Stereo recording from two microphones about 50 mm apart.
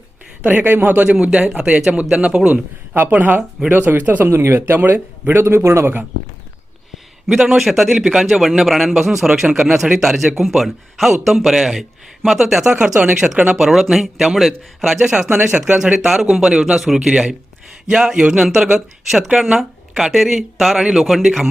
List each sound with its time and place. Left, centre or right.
0.4 s speech: right
1.2 s a man's voice: right
2.5 s speech: right
4.2 s speech: right
7.3 s a man's voice: centre
8.2 s a man's voice: centre
12.8 s speech: centre
13.5 s a man's voice: centre
15.1 s speech: centre
16.3 s a man's voice: centre